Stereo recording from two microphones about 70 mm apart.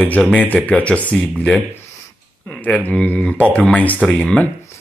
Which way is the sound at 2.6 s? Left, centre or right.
Left.